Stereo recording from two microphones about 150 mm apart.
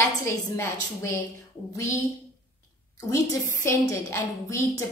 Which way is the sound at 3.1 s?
20° left (ahead or behind).